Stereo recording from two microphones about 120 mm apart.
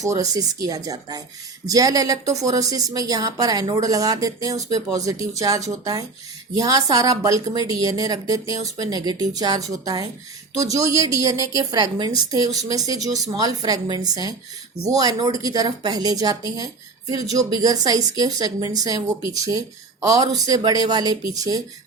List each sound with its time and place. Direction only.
0.0 s a woman's voice: 30° right (ahead or behind)